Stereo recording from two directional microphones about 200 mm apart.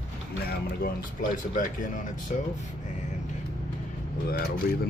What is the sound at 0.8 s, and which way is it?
Speech, 40° left (ahead or behind).